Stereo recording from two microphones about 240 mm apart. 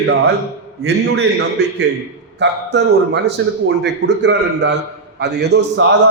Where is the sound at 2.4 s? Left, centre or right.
Right.